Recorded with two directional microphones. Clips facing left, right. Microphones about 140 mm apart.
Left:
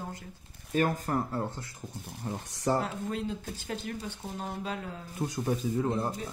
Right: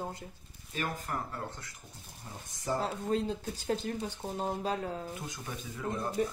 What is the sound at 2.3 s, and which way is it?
Speech, 70° left (ahead or behind).